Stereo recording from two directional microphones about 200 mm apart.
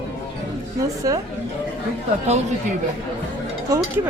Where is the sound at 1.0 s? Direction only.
20° right (ahead or behind).